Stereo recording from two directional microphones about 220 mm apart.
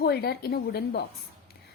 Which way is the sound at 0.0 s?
45° left (ahead or behind).